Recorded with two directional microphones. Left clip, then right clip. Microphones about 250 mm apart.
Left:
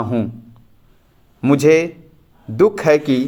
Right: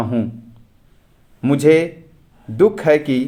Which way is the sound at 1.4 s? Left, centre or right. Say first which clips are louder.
Left 1 dB; centre.